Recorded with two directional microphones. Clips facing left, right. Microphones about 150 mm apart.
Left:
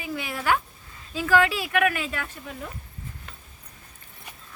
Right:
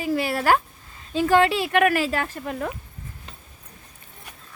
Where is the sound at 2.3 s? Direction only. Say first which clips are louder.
Right 8 dB; 70° right (ahead or behind).